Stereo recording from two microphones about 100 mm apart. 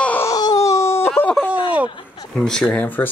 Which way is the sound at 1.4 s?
15° right (ahead or behind).